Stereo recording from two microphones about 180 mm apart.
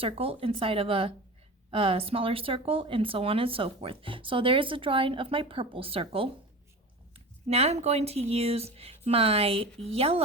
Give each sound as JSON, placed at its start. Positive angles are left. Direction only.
{"t": 0.0, "sound": "speech", "side_deg": -30}
{"t": 7.4, "sound": "speech", "side_deg": -35}